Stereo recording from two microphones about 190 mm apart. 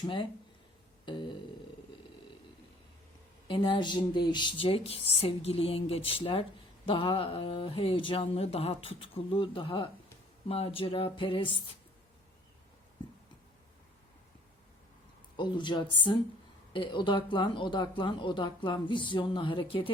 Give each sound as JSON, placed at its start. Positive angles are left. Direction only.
{"t": 0.0, "sound": "speech", "side_deg": 25}
{"t": 1.0, "sound": "a sound", "side_deg": 25}
{"t": 3.4, "sound": "speech", "side_deg": 25}
{"t": 15.4, "sound": "speech", "side_deg": 25}